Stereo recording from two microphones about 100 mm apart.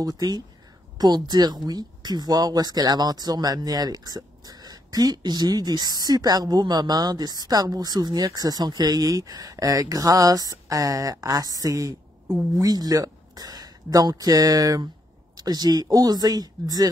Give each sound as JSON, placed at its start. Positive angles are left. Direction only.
{"t": 0.0, "sound": "speech", "side_deg": -40}
{"t": 12.3, "sound": "speech", "side_deg": -25}
{"t": 12.6, "sound": "speech", "side_deg": -40}